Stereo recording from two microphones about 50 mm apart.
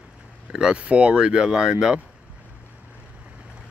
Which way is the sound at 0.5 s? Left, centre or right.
Centre.